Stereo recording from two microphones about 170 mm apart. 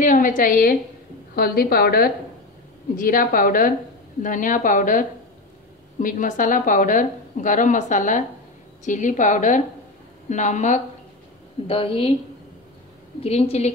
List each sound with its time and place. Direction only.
0.0 s a woman's voice: 50° left (ahead or behind)
11.6 s a woman's voice: 35° left (ahead or behind)
13.2 s a woman's voice: 35° left (ahead or behind)